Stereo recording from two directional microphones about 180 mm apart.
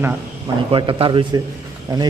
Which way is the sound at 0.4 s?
25° right (ahead or behind).